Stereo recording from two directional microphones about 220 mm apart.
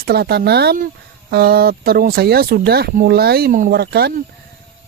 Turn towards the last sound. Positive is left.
turn(degrees=-45)  # may be behind; listen again after turning